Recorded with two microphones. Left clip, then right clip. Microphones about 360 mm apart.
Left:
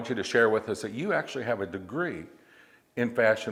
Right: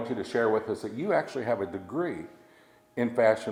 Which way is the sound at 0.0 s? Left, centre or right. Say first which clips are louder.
Left 3 dB; left.